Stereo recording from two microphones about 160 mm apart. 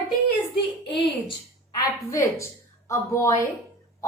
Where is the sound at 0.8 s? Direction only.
30° left (ahead or behind).